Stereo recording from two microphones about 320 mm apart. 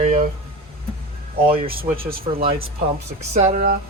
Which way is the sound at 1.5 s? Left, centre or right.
Centre.